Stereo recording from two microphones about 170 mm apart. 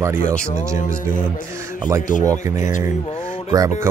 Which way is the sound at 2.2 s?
20° right (ahead or behind).